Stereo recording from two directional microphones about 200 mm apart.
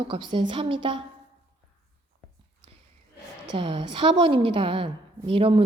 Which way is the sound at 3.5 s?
25° right (ahead or behind).